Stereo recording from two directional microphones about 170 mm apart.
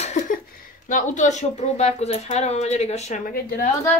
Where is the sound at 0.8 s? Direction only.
50° left (ahead or behind).